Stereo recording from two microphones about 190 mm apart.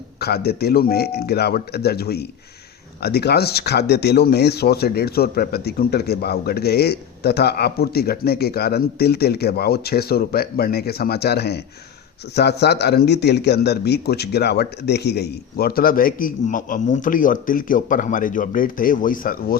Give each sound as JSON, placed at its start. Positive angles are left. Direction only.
{"t": 0.2, "sound": "speech", "side_deg": 55}